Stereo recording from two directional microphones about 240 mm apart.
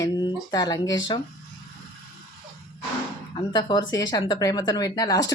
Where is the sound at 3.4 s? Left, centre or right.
Centre.